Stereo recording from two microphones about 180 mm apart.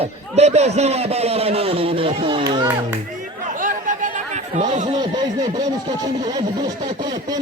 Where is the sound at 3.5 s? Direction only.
45° right (ahead or behind).